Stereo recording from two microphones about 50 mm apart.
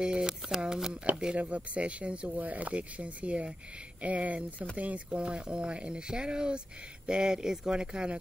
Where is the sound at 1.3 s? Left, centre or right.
Right.